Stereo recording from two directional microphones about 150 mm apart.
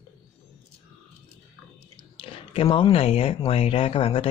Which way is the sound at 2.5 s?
35° left (ahead or behind).